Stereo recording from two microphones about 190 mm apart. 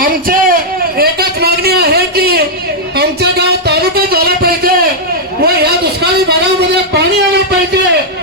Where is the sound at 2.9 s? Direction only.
55° right (ahead or behind).